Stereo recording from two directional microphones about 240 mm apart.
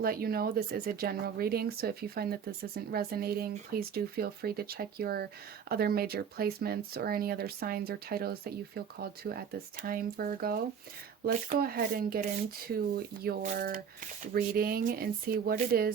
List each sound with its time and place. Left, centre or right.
0.0 s speech: right